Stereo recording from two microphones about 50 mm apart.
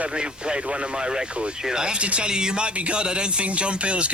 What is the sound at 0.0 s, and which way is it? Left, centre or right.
Speech, centre.